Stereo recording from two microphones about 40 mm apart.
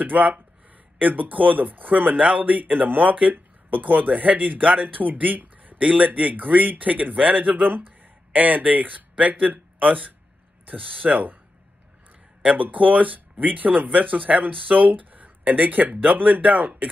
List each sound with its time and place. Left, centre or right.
0.0 s speech: right
2.6 s speech: right
5.8 s speech: right
6.0 s speech: right
10.6 s a sound: right
11.0 s speech: right
12.7 s speech: right